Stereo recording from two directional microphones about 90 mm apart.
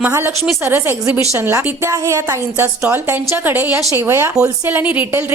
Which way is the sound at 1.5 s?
35° right (ahead or behind).